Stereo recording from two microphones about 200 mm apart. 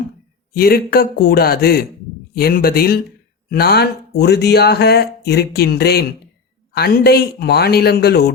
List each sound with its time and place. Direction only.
0.5 s a man's voice: 50° left (ahead or behind)